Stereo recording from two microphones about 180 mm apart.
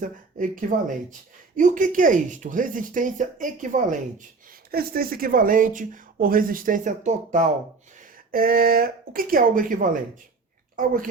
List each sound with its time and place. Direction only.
0.0 s speech: 45° right (ahead or behind)
4.7 s speech: 55° right (ahead or behind); by 7.4 s 40° right (ahead or behind)
8.3 s speech: 55° right (ahead or behind)